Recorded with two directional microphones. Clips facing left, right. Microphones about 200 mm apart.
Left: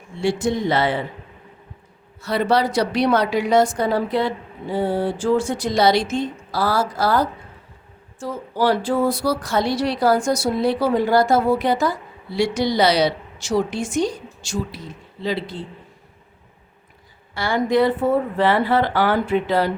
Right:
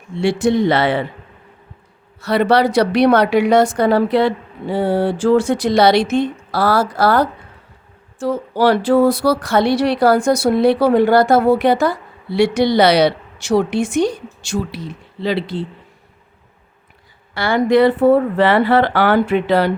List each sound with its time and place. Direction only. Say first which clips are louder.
0.2 s a woman's voice: right 6 dB; 70° right (ahead or behind)
2.2 s a woman's voice: right 5 dB; 70° right (ahead or behind)
17.3 s a woman's voice: right 5 dB; 70° right (ahead or behind)